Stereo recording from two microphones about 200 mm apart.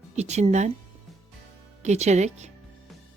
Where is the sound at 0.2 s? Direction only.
35° right (ahead or behind).